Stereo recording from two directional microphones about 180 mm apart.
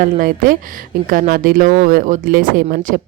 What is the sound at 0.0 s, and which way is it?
Speech, 50° right (ahead or behind).